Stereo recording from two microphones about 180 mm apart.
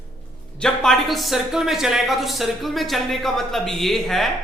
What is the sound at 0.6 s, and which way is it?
Speech, centre (ahead or behind).